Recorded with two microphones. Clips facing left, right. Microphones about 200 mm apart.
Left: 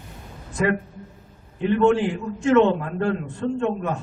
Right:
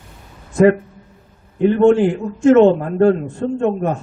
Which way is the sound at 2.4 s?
45° right (ahead or behind).